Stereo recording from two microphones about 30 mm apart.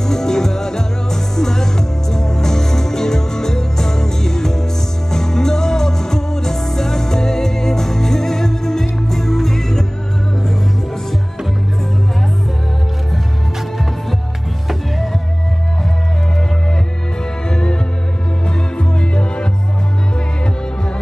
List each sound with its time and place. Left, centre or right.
0.0 s music: centre
17.5 s music: left
18.8 s music: left